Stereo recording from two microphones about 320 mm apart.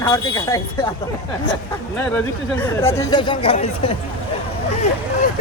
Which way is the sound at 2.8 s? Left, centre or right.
Centre.